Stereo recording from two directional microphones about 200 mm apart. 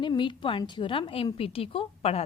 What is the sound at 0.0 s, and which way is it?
A woman's voice, 25° left (ahead or behind).